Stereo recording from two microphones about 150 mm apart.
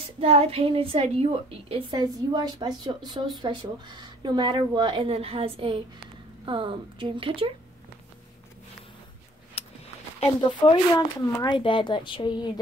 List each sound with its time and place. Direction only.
0.2 s a woman's voice: 40° right (ahead or behind)
9.6 s a sound: 40° left (ahead or behind)
10.2 s speech: 35° left (ahead or behind)